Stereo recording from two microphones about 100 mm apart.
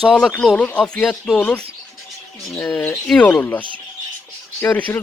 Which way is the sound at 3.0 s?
10° left (ahead or behind).